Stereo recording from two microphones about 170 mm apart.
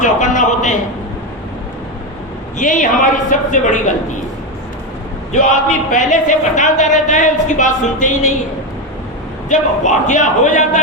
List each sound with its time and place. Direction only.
0.0 s a sound: 50° left (ahead or behind)
2.6 s speech: 50° left (ahead or behind)
5.3 s speech: 50° left (ahead or behind)
9.5 s speech: 45° left (ahead or behind)